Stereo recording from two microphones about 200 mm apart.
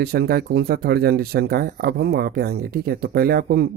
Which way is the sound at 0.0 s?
50° right (ahead or behind).